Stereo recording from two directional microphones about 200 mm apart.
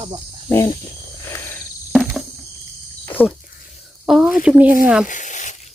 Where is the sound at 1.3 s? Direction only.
10° left (ahead or behind).